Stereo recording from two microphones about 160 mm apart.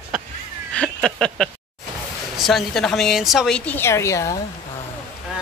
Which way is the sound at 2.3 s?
Centre (ahead or behind).